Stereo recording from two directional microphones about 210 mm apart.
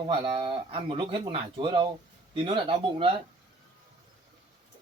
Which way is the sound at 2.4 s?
25° right (ahead or behind).